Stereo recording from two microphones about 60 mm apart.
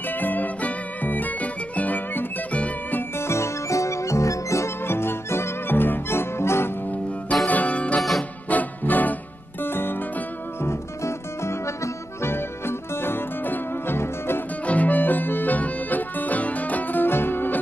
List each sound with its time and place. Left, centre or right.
0.1 s music: left
3.0 s music: left
7.4 s music: left
10.7 s music: left
14.7 s music: left